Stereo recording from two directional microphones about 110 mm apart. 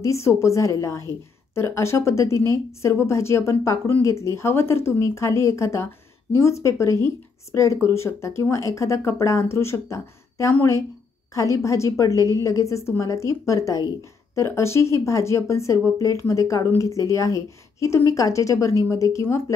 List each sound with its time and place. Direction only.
0.0 s a woman's voice: 25° left (ahead or behind)